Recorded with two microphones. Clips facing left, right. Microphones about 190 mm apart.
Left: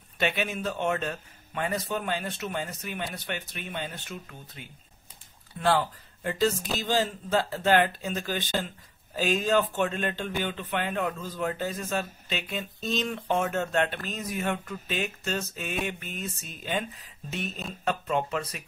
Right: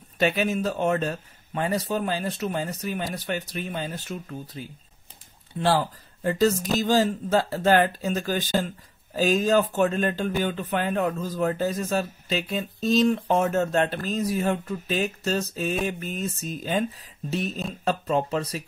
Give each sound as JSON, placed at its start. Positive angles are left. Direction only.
{"t": 0.2, "sound": "speech", "side_deg": -35}